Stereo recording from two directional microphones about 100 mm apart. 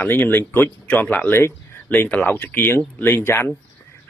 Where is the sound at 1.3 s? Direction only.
20° left (ahead or behind).